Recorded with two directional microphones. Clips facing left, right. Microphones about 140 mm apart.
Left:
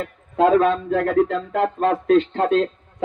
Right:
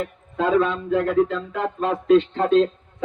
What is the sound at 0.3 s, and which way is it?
A man's voice, 45° left (ahead or behind).